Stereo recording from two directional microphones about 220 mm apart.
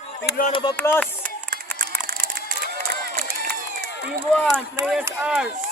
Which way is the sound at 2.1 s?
45° right (ahead or behind).